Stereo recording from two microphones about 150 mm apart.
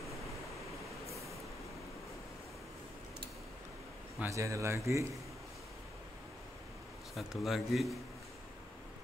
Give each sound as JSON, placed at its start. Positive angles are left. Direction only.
{"t": 4.2, "sound": "speech", "side_deg": -20}
{"t": 7.2, "sound": "a man's voice", "side_deg": 0}